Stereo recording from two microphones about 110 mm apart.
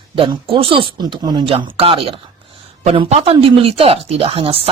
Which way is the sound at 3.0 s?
70° right (ahead or behind).